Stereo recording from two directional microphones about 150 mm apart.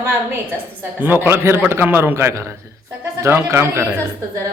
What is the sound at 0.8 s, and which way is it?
A man's voice, 15° right (ahead or behind).